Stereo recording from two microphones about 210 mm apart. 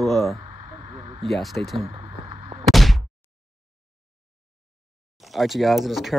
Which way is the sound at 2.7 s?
Centre (ahead or behind).